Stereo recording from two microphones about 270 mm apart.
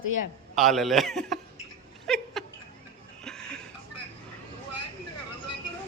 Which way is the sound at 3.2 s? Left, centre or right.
Centre.